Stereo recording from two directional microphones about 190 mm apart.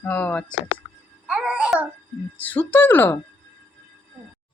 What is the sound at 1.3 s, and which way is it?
Baby laughter, 5° right (ahead or behind).